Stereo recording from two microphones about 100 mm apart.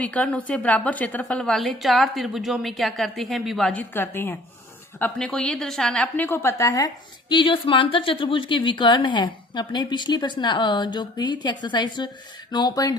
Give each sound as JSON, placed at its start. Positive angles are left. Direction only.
{"t": 0.0, "sound": "a woman's voice", "side_deg": 15}
{"t": 3.7, "sound": "a woman's voice", "side_deg": 20}
{"t": 6.2, "sound": "a woman's voice", "side_deg": 25}